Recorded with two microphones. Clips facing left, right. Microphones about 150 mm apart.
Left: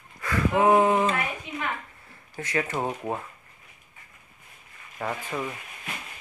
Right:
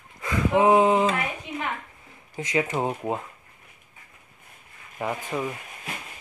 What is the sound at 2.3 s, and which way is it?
Speech, 15° right (ahead or behind).